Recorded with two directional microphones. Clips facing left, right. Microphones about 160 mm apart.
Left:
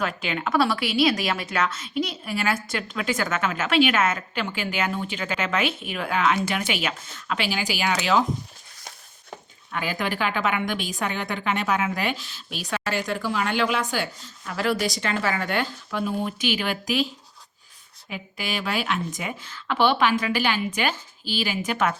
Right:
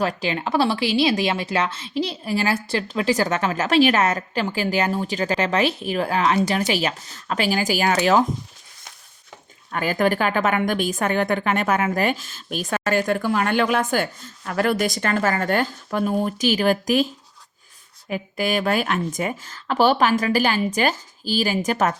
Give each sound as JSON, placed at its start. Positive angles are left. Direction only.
{"t": 0.0, "sound": "speech", "side_deg": -35}
{"t": 9.7, "sound": "a woman's voice", "side_deg": -45}
{"t": 18.1, "sound": "speech", "side_deg": -45}